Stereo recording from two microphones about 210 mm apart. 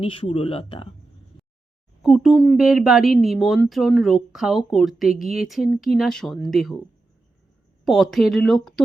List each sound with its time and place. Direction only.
0.0 s speech: 25° left (ahead or behind)
2.0 s speech: centre (ahead or behind)
7.9 s speech: centre (ahead or behind)